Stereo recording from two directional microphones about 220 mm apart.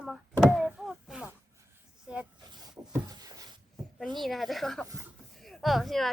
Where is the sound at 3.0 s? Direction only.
15° right (ahead or behind).